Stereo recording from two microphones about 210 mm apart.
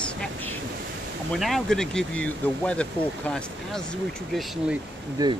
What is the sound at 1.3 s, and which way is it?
Speech, centre (ahead or behind).